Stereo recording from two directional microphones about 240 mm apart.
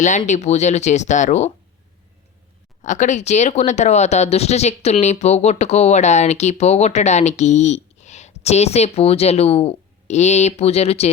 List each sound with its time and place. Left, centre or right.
0.0 s speech: left
2.8 s speech: left